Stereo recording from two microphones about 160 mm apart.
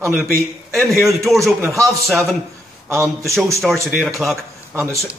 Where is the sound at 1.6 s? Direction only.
15° right (ahead or behind).